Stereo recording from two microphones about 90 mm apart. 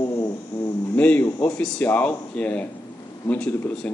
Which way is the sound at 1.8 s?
15° left (ahead or behind).